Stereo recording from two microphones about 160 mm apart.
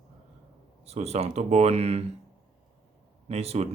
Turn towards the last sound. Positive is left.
turn(degrees=-40)  # may be behind; listen again after turning